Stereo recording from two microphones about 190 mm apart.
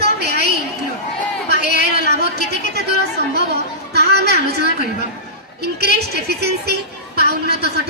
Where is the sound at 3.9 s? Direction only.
60° right (ahead or behind).